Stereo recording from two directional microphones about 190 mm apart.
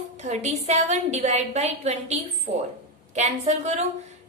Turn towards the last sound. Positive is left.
turn(degrees=-35)  # may be behind; listen again after turning